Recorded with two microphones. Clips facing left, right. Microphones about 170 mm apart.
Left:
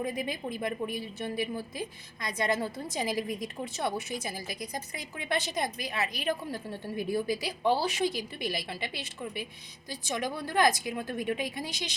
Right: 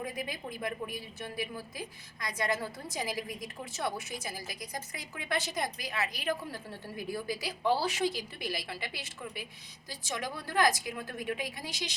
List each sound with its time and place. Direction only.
0.0 s a woman's voice: 20° left (ahead or behind)